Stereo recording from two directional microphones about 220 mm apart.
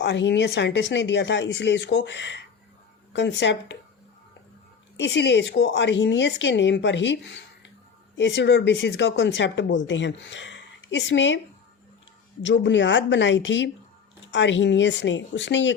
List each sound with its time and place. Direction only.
0.0 s speech: 50° left (ahead or behind)
4.9 s speech: 55° left (ahead or behind)
12.4 s speech: 55° left (ahead or behind)